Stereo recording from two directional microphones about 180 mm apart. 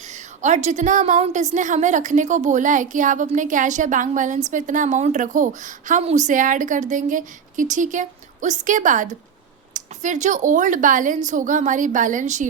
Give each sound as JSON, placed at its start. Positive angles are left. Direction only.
{"t": 0.1, "sound": "a woman's voice", "side_deg": -40}